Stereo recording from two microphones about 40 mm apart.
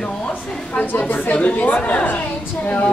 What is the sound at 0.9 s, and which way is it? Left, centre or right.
Speech, left.